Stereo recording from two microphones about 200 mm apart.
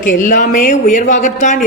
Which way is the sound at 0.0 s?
40° left (ahead or behind).